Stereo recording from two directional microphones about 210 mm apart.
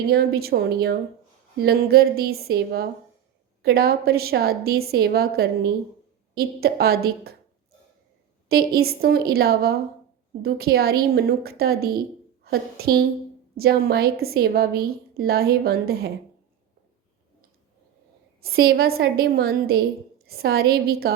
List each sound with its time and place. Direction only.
0.1 s a woman's voice: 45° right (ahead or behind)
8.4 s a woman's voice: 45° right (ahead or behind)
18.4 s a woman's voice: 45° right (ahead or behind)